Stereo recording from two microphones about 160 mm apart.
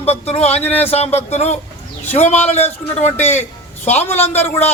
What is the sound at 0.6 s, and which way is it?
Speech, 10° left (ahead or behind).